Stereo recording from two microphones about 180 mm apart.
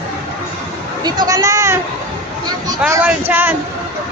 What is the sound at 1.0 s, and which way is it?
A woman's voice, 20° right (ahead or behind).